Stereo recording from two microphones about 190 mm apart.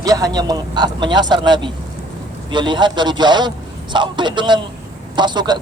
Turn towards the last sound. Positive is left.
turn(degrees=-20)  # may be behind; listen again after turning